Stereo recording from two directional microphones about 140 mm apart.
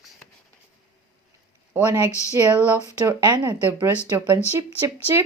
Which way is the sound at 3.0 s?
25° right (ahead or behind).